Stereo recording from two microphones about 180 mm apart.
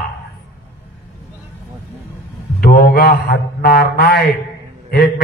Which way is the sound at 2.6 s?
55° left (ahead or behind).